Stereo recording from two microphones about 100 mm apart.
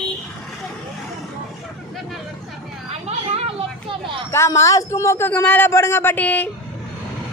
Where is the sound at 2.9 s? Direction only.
90° right.